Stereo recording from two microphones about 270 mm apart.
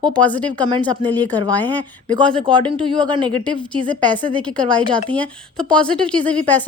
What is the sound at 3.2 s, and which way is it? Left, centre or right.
A woman's voice, centre.